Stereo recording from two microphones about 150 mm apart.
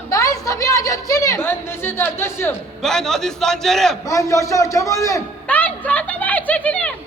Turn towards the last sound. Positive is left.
turn(degrees=10)  # may be behind; listen again after turning